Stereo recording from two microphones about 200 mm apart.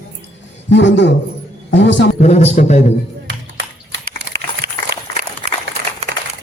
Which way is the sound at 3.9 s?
60° right (ahead or behind).